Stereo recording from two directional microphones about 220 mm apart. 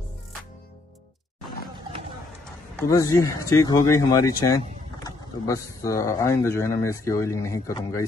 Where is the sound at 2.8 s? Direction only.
15° left (ahead or behind).